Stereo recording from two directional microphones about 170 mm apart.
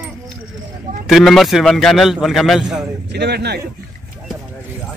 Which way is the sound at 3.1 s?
75° right (ahead or behind).